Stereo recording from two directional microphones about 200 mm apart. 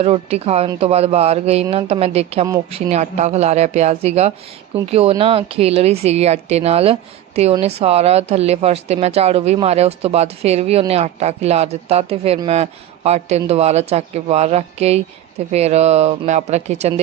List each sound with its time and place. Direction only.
0.0 s a woman's voice: 30° right (ahead or behind)